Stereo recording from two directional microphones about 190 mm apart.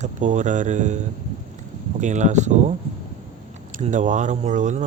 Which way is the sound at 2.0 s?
40° right (ahead or behind).